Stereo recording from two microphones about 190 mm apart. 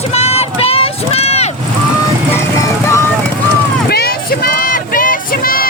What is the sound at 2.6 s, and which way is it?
Music, 15° left (ahead or behind).